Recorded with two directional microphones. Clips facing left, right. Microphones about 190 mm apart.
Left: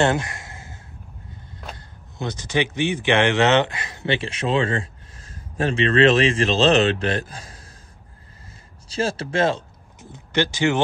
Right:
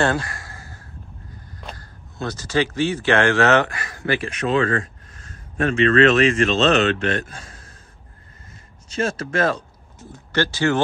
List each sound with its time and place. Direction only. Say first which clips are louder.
0.0 s a sound: left 1 dB; 20° left (ahead or behind)
1.8 s speech: right 1 dB; 15° left (ahead or behind); by 7.7 s 35° left (ahead or behind)
8.8 s speech: even; 30° left (ahead or behind); by 10.8 s 15° left (ahead or behind)